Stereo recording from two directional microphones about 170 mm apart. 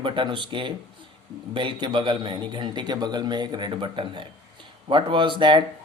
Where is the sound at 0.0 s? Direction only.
30° right (ahead or behind).